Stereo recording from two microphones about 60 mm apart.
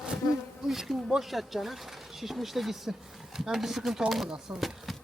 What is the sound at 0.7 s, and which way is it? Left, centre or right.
Speech, centre.